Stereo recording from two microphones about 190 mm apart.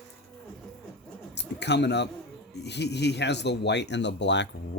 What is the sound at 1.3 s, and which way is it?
Speech, 65° left (ahead or behind).